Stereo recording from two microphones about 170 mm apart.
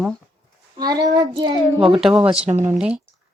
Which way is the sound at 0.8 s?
25° right (ahead or behind).